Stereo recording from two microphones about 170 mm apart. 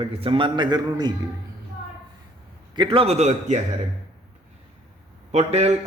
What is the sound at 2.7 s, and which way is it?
Speech, 30° right (ahead or behind).